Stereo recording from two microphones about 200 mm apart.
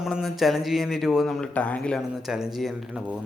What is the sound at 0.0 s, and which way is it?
Speech, centre (ahead or behind).